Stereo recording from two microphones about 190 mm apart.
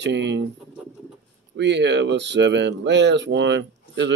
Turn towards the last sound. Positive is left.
turn(degrees=-65)  # may be behind; listen again after turning